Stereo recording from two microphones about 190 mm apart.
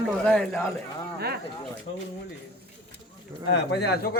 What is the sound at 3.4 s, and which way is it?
Speech, 60° left (ahead or behind).